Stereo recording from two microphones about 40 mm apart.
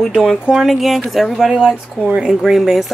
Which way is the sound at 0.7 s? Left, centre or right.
Centre.